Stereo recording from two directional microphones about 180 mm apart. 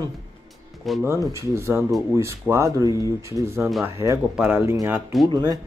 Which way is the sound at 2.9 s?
20° left (ahead or behind).